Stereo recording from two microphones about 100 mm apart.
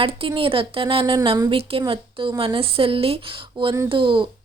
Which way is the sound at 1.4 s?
70° right (ahead or behind).